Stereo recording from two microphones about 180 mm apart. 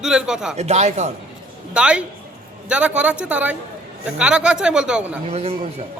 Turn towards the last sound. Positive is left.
turn(degrees=-35)  # may be behind; listen again after turning